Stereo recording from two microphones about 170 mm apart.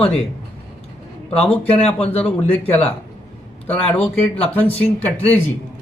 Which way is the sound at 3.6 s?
10° left (ahead or behind).